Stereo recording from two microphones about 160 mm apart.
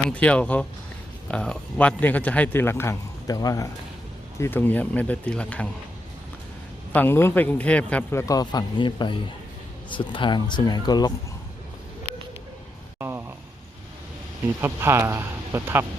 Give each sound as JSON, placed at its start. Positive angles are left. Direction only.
{"t": 0.1, "sound": "a man's voice", "side_deg": 10}
{"t": 6.9, "sound": "a man's voice", "side_deg": 15}
{"t": 8.3, "sound": "speech", "side_deg": 25}
{"t": 13.0, "sound": "a sound", "side_deg": -15}
{"t": 14.4, "sound": "speech", "side_deg": -15}